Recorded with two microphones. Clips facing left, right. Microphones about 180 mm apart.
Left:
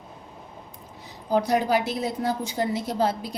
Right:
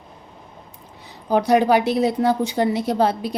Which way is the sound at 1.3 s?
70° right (ahead or behind).